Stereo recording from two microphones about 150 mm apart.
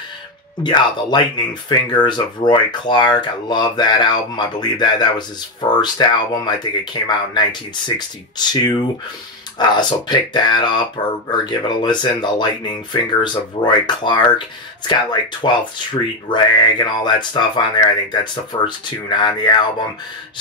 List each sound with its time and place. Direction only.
0.7 s speech: 30° left (ahead or behind)
15.4 s speech: 30° left (ahead or behind)